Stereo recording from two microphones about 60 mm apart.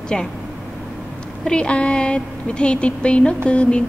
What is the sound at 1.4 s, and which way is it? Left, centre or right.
A woman's voice, centre.